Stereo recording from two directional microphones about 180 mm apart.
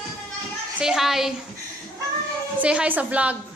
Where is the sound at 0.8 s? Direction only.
5° right (ahead or behind).